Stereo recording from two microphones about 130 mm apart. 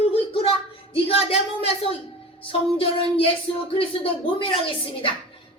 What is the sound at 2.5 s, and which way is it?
Speech, 45° left (ahead or behind).